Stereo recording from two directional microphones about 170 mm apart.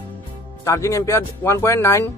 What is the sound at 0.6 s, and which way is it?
Speech, 20° left (ahead or behind).